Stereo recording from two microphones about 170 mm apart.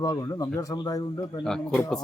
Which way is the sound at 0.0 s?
20° left (ahead or behind).